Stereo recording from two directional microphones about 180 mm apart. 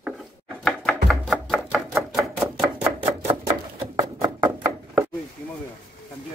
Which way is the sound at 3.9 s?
20° right (ahead or behind).